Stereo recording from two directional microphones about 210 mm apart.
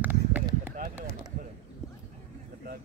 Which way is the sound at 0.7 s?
40° right (ahead or behind).